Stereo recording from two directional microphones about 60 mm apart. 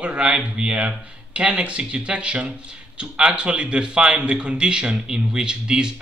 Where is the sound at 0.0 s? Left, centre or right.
Centre.